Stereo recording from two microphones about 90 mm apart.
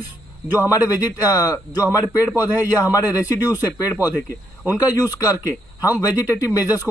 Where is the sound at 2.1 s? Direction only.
20° right (ahead or behind).